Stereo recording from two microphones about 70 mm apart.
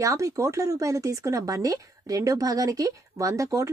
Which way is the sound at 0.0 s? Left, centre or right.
Right.